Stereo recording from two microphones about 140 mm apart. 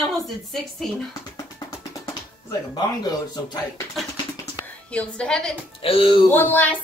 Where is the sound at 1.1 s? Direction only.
25° left (ahead or behind).